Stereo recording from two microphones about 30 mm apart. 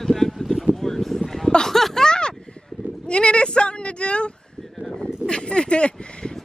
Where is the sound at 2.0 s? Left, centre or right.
Left.